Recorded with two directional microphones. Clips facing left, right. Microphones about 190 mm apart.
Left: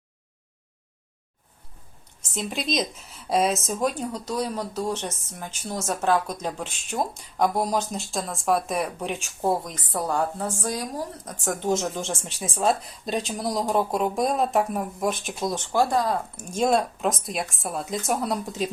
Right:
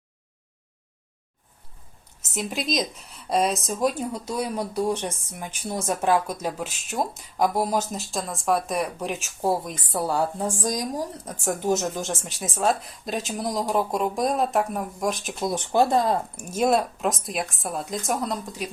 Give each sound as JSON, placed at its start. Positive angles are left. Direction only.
{"t": 2.3, "sound": "speech", "side_deg": 0}
{"t": 15.5, "sound": "speech", "side_deg": -20}
{"t": 16.4, "sound": "speech", "side_deg": -5}
{"t": 18.4, "sound": "speech", "side_deg": 25}